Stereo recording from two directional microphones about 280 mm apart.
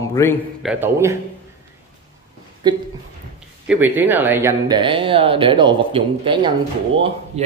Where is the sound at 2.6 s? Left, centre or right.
Centre.